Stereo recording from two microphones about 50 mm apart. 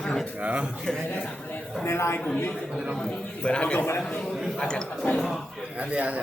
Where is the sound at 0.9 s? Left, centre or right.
Centre.